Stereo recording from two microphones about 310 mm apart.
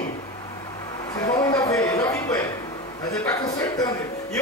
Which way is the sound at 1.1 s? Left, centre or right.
Centre.